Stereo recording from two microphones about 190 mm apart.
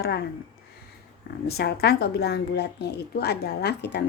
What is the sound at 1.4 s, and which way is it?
A woman's voice, 60° left (ahead or behind).